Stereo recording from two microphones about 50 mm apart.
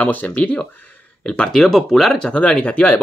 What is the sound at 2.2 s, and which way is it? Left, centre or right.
Speech, centre.